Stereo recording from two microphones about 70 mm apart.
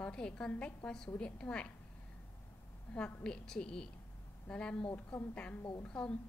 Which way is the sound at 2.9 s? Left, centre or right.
Centre.